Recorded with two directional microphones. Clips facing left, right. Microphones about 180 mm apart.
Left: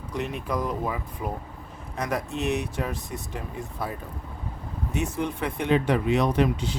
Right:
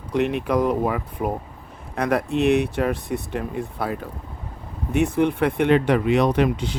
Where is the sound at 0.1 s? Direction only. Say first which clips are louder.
Right 9 dB; 70° right (ahead or behind).